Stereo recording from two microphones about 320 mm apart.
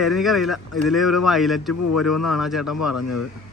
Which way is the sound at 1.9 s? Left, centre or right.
Left.